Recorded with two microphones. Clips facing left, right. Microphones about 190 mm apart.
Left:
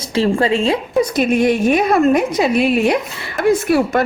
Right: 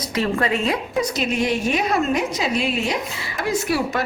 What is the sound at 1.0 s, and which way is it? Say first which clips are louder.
A woman's voice: left 7 dB; 55° left (ahead or behind).